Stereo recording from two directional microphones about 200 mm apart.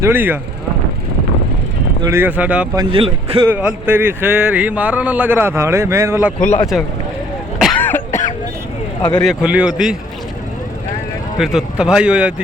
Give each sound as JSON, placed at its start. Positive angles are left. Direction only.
{"t": 0.0, "sound": "speech", "side_deg": -10}
{"t": 2.0, "sound": "speech", "side_deg": -15}
{"t": 2.7, "sound": "speech", "side_deg": -25}
{"t": 3.4, "sound": "speech", "side_deg": -10}
{"t": 7.6, "sound": "throat clearing", "side_deg": 5}
{"t": 9.0, "sound": "speech", "side_deg": 20}
{"t": 9.2, "sound": "speech", "side_deg": -5}
{"t": 11.3, "sound": "speech", "side_deg": 0}